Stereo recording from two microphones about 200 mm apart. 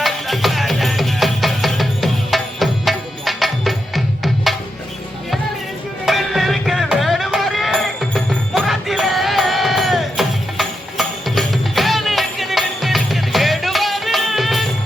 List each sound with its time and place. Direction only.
0.0 s music: centre (ahead or behind)
6.1 s music: centre (ahead or behind)